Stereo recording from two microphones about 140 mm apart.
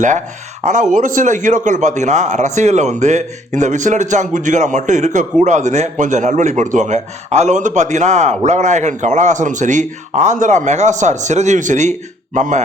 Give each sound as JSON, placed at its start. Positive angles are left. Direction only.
{"t": 0.6, "sound": "a man's voice", "side_deg": -60}